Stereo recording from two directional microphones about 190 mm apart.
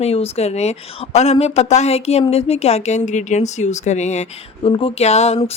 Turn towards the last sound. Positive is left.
turn(degrees=35)  # may be behind; listen again after turning